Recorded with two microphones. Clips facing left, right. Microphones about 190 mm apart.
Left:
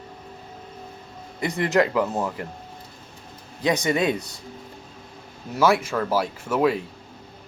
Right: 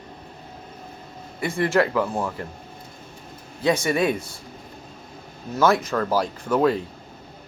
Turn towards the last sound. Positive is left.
turn(degrees=5)  # may be behind; listen again after turning